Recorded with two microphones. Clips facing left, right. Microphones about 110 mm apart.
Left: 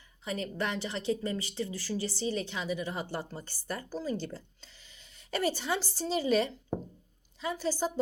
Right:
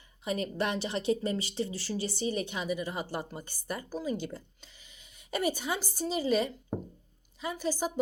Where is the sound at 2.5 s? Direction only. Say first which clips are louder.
Right 1 dB; 10° right (ahead or behind).